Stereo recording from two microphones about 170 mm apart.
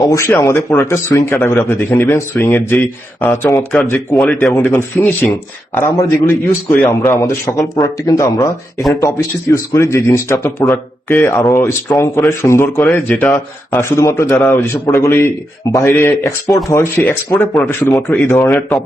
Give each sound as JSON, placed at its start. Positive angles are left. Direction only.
{"t": 0.0, "sound": "a man's voice", "side_deg": 20}